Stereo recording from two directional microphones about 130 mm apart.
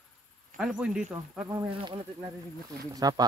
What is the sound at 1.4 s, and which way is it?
Speech, 30° right (ahead or behind).